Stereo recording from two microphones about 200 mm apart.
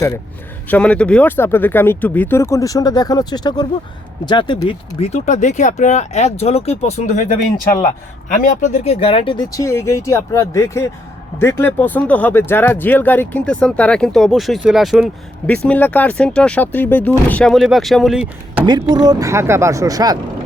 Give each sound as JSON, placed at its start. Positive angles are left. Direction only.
{"t": 0.7, "sound": "speech", "side_deg": 5}
{"t": 18.6, "sound": "speech", "side_deg": -20}